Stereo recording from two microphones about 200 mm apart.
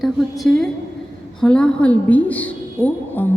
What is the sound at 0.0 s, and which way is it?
A woman's voice, centre (ahead or behind).